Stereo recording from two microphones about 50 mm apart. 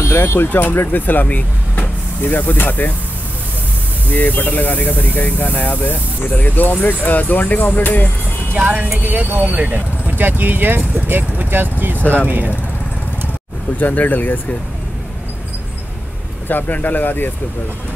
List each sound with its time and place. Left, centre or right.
0.2 s speech: left
4.1 s speech: left
8.5 s speech: right
13.7 s speech: left
16.4 s speech: left